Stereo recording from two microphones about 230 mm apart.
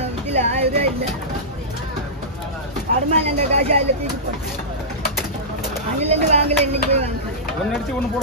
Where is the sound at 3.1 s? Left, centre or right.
Right.